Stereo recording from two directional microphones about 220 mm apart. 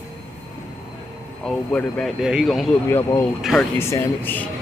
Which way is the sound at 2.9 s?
10° left (ahead or behind).